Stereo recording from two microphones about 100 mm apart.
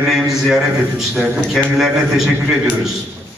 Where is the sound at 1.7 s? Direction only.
5° right (ahead or behind).